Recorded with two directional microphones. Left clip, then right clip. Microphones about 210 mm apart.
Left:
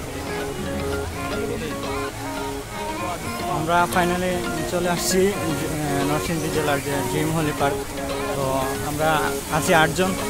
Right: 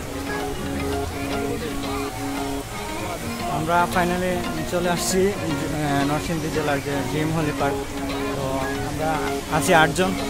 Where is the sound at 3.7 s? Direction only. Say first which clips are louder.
Left 1 dB; 5° left (ahead or behind).